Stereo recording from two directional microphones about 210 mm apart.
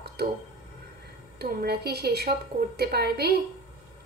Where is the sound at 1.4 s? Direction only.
50° right (ahead or behind).